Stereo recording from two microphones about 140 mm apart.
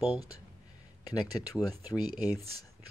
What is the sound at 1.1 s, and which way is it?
Speech, 25° left (ahead or behind).